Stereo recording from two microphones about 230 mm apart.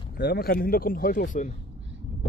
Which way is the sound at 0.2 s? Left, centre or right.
Left.